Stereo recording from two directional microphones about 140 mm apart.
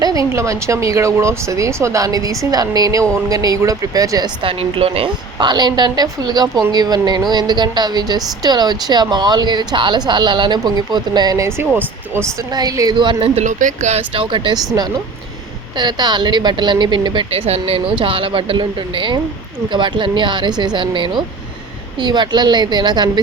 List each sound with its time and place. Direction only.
0.0 s speech: 25° right (ahead or behind)
4.4 s a woman's voice: 40° right (ahead or behind); by 12.3 s 15° right (ahead or behind)
12.5 s a woman's voice: 25° right (ahead or behind)
13.3 s speech: 60° right (ahead or behind)
14.2 s a woman's voice: 35° right (ahead or behind)